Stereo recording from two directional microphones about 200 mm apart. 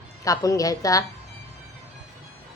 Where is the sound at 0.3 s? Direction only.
15° left (ahead or behind).